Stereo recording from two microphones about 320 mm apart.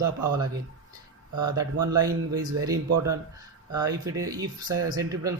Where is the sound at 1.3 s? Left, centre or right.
Right.